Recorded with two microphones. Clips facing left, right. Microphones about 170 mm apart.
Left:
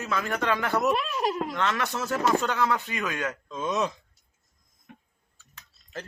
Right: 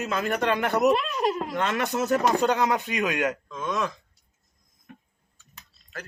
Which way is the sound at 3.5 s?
25° left (ahead or behind).